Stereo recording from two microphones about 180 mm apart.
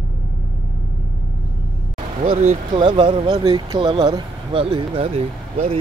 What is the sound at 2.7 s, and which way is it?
Speech, 25° right (ahead or behind).